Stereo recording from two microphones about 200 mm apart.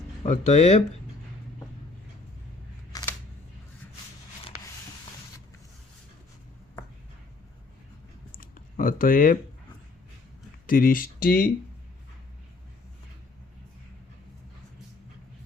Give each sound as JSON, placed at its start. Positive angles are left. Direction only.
{"t": 0.2, "sound": "speech", "side_deg": 35}
{"t": 2.9, "sound": "single-lens reflex camera", "side_deg": 20}
{"t": 8.4, "sound": "typing", "side_deg": 45}
{"t": 10.7, "sound": "speech", "side_deg": 45}